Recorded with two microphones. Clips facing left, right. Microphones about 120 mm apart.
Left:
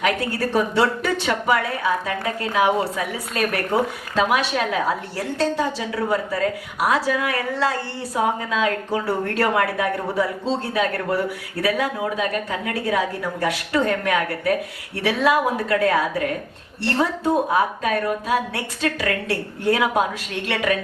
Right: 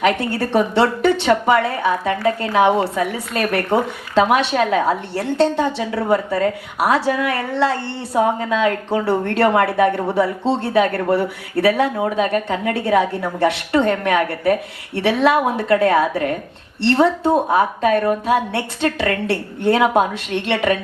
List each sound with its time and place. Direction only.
0.0 s a woman's voice: 25° right (ahead or behind)